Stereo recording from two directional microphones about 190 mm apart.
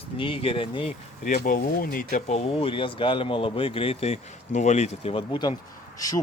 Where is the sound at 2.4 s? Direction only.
30° left (ahead or behind).